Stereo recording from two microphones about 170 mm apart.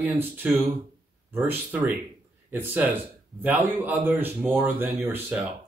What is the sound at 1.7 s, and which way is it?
Speech, 10° right (ahead or behind).